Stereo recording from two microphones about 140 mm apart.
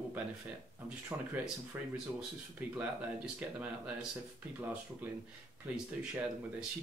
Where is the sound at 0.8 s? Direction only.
5° right (ahead or behind).